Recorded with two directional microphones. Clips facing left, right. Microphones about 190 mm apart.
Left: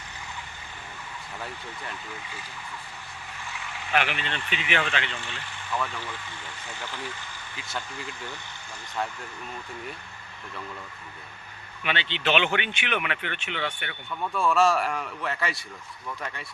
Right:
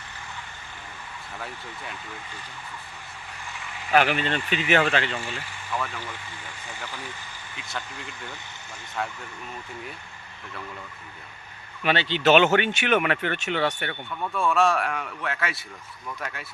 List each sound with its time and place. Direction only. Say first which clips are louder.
3.9 s speech: right 6 dB; 40° right (ahead or behind)
7.5 s a man's voice: even; centre (ahead or behind)
9.0 s a man's voice: even; centre (ahead or behind)
11.8 s speech: right 6 dB; 40° right (ahead or behind)
14.3 s a man's voice: even; centre (ahead or behind)